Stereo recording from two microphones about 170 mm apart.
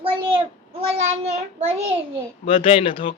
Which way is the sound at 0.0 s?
30° right (ahead or behind).